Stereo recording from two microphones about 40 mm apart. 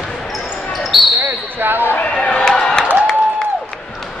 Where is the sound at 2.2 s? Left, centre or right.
Left.